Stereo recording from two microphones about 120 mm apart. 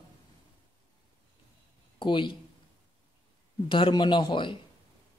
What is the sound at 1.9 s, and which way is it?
Speech, 45° left (ahead or behind).